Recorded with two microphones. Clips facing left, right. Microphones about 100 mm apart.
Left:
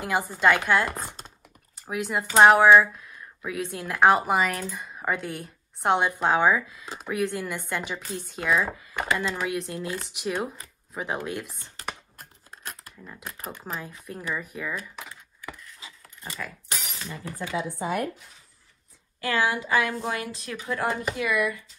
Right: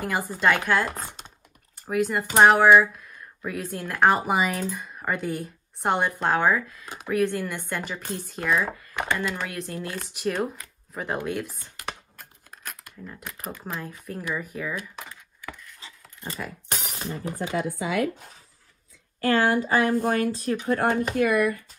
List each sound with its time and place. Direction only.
0.0 s speech: centre (ahead or behind)
12.2 s a sound: 30° left (ahead or behind)
13.0 s speech: centre (ahead or behind)
15.0 s a sound: 10° left (ahead or behind)
17.0 s speech: 45° right (ahead or behind)
17.7 s speech: 90° right
19.2 s speech: 45° right (ahead or behind)